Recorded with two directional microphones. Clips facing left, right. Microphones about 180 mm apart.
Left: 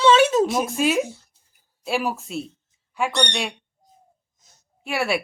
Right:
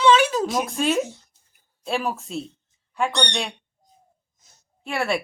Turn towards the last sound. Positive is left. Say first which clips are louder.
# left 1 dB
turn(degrees=5)  # may be behind; listen again after turning